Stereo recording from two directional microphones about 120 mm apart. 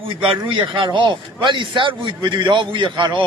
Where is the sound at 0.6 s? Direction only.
45° right (ahead or behind).